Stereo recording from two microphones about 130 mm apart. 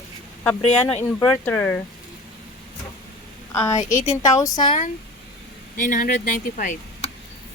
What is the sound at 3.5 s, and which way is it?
Speech, 20° left (ahead or behind).